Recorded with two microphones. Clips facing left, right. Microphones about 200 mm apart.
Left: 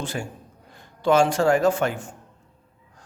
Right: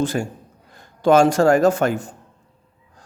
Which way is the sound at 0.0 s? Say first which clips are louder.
Right 9 dB; 45° right (ahead or behind).